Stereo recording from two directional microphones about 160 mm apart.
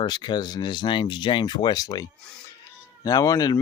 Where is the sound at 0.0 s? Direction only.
25° left (ahead or behind).